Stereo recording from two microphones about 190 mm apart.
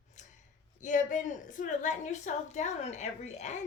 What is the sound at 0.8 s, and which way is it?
A woman's voice, 40° left (ahead or behind).